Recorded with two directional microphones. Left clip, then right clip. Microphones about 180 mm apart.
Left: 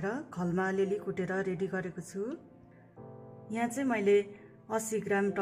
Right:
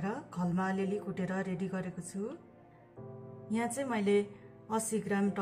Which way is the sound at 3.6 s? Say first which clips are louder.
Left 3 dB; 40° left (ahead or behind).